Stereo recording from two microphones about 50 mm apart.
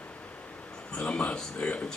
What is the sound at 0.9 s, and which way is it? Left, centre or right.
Speech, left.